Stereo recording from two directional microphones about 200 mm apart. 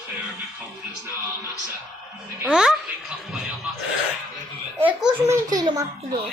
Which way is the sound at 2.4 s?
5° right (ahead or behind).